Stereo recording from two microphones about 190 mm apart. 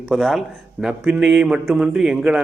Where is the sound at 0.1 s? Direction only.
Centre (ahead or behind).